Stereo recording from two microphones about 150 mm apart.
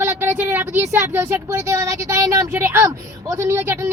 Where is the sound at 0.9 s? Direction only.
15° right (ahead or behind).